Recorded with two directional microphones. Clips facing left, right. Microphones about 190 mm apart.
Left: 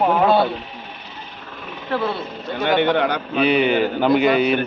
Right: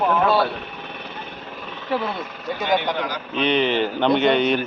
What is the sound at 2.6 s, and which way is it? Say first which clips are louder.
Speech: left 5 dB; 60° left (ahead or behind).